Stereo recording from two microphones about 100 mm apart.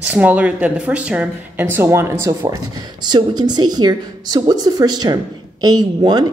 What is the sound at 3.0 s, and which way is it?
A woman's voice, 45° right (ahead or behind).